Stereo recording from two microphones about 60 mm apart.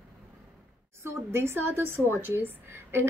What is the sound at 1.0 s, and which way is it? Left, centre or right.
A woman's voice, right.